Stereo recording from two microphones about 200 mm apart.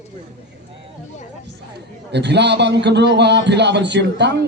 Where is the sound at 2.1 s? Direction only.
60° right (ahead or behind).